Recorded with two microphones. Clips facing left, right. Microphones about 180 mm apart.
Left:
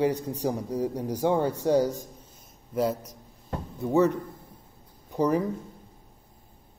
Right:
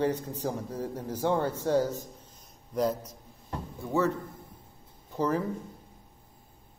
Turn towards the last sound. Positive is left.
turn(degrees=15)  # may be behind; listen again after turning